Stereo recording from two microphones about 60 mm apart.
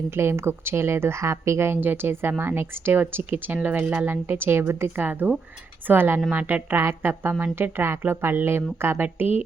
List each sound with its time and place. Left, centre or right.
0.1 s a woman's voice: right
4.0 s a woman's voice: right